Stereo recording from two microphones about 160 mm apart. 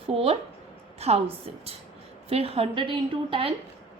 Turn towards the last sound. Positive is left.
turn(degrees=-30)  # may be behind; listen again after turning